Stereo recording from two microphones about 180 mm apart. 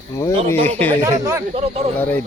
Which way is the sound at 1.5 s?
35° right (ahead or behind).